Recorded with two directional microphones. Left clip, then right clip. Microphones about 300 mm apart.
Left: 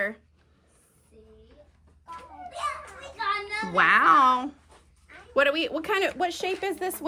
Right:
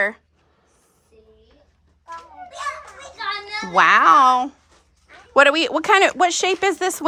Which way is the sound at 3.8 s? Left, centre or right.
Centre.